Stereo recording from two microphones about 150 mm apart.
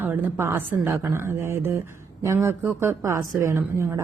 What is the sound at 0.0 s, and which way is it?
Speech, 15° right (ahead or behind).